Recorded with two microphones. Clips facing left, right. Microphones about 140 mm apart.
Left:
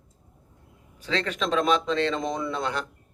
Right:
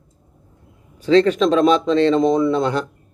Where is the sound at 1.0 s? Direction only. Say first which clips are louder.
Right 14 dB; 35° right (ahead or behind).